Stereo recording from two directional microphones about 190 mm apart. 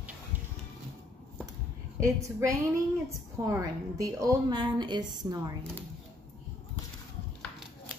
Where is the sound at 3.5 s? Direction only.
15° right (ahead or behind).